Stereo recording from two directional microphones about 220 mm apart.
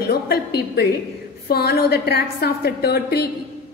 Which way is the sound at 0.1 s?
45° left (ahead or behind).